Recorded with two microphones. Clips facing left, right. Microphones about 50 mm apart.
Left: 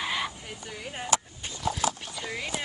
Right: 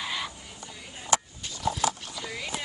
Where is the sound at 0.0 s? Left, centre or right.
Centre.